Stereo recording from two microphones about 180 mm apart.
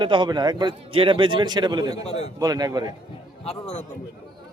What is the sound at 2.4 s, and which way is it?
Speech, 20° right (ahead or behind).